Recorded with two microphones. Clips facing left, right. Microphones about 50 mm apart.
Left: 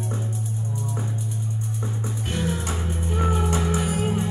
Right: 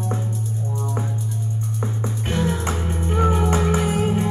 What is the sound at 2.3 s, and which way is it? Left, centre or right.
Music, right.